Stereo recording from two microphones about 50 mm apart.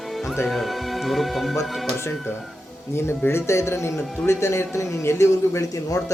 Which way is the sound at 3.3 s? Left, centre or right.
Left.